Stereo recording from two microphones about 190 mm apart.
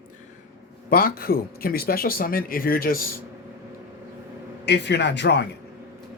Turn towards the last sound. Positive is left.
turn(degrees=65)  # may be behind; listen again after turning